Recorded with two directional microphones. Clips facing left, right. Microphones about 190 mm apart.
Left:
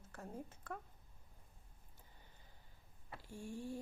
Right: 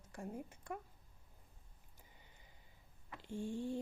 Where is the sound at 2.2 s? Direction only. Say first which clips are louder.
Even; 15° right (ahead or behind).